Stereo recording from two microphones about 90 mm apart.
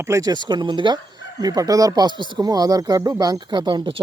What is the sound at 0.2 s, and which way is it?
Speech, 50° right (ahead or behind).